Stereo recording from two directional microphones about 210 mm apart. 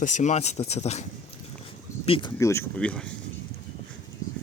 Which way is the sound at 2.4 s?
15° left (ahead or behind).